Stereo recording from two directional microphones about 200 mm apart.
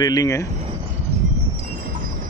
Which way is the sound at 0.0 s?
20° left (ahead or behind).